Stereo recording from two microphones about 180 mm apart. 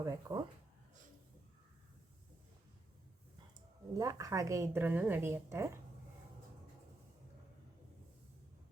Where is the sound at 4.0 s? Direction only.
20° right (ahead or behind).